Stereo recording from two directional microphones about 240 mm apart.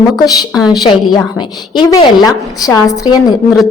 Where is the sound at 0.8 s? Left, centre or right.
Centre.